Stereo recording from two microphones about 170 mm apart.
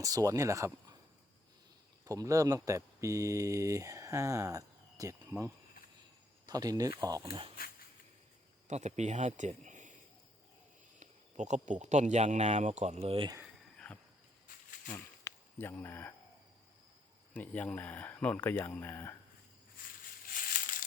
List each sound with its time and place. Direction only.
0.0 s speech: 20° right (ahead or behind)
2.0 s speech: 20° right (ahead or behind)
6.4 s speech: 20° right (ahead or behind)
7.6 s speech: 60° left (ahead or behind)
8.6 s a man's voice: 45° right (ahead or behind)
11.0 s speech: 45° right (ahead or behind)
13.7 s cricket: 5° left (ahead or behind)
14.9 s speech: 15° left (ahead or behind)
17.3 s speech: 10° left (ahead or behind)